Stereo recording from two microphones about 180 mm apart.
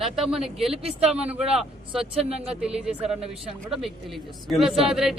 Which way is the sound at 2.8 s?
5° right (ahead or behind).